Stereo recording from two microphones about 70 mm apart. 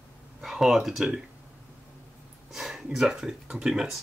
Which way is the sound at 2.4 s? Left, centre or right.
Centre.